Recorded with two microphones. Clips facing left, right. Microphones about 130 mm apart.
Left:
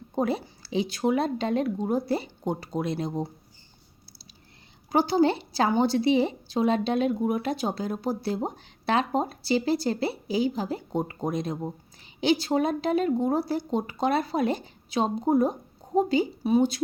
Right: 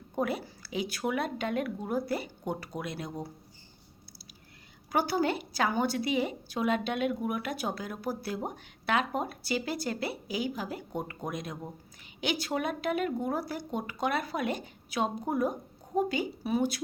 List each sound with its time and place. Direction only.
0.2 s a woman's voice: 25° left (ahead or behind)
4.9 s a woman's voice: 25° left (ahead or behind)